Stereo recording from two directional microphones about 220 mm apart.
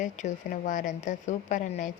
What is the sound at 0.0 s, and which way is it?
A woman's voice, 35° left (ahead or behind).